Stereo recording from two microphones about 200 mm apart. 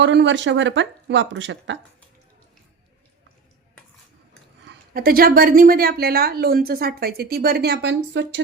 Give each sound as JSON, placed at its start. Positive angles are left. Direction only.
{"t": 0.0, "sound": "speech", "side_deg": -60}
{"t": 4.9, "sound": "a woman's voice", "side_deg": -45}